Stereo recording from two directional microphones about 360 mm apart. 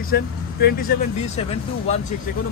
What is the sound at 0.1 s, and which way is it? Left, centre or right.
A man's voice, left.